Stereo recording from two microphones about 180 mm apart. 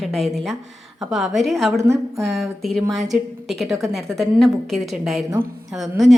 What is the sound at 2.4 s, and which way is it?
A woman's voice, centre (ahead or behind).